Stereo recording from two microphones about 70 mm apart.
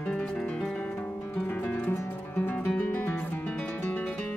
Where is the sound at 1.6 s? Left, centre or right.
Centre.